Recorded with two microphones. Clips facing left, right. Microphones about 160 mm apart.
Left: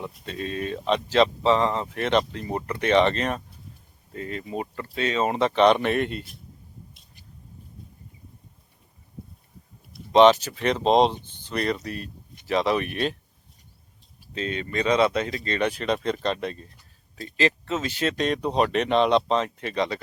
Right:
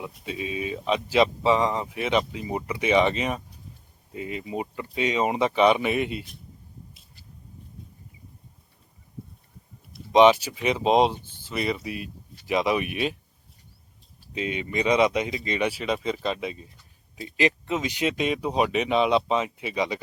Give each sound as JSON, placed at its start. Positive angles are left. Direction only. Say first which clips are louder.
{"t": 0.0, "sound": "speech", "louder": "even", "side_deg": -10}
{"t": 10.1, "sound": "speech", "louder": "left 1 dB", "side_deg": -10}
{"t": 14.3, "sound": "speech", "louder": "even", "side_deg": -15}